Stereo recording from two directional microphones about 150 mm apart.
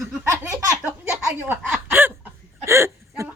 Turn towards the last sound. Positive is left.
turn(degrees=-15)  # may be behind; listen again after turning